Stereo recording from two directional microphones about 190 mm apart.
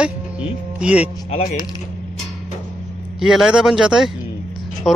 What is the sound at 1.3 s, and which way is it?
Speech, 35° left (ahead or behind).